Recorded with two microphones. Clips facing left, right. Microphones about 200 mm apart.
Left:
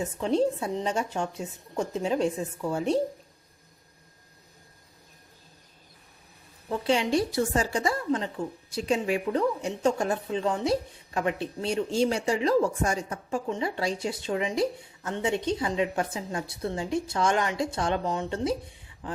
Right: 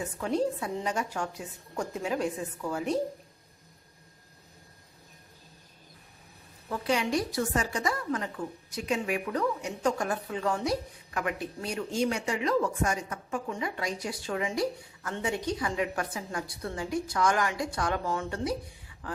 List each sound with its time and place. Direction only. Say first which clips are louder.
0.0 s a woman's voice: left 4 dB; 25° left (ahead or behind)
6.7 s a woman's voice: left 3 dB; 25° left (ahead or behind)